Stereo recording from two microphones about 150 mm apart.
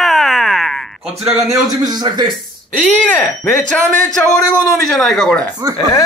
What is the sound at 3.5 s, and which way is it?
Speech, 5° left (ahead or behind).